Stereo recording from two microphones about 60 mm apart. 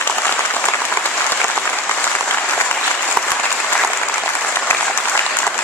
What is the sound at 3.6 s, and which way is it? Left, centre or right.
Applause, centre.